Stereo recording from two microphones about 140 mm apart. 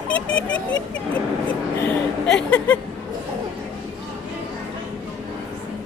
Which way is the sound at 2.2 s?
5° left (ahead or behind).